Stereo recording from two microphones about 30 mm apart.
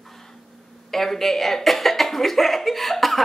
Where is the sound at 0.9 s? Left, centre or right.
Centre.